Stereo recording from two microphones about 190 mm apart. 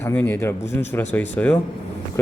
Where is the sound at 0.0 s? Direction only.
10° left (ahead or behind).